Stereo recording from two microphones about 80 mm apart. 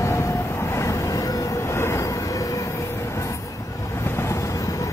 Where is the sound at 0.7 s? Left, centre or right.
Left.